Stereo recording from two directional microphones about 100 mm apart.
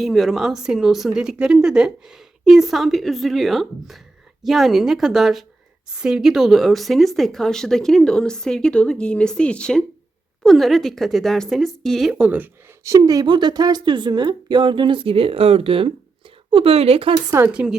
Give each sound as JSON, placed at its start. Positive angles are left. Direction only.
{"t": 0.0, "sound": "a woman's voice", "side_deg": 0}
{"t": 12.1, "sound": "speech", "side_deg": -15}
{"t": 12.8, "sound": "a woman's voice", "side_deg": -35}
{"t": 17.5, "sound": "speech", "side_deg": -10}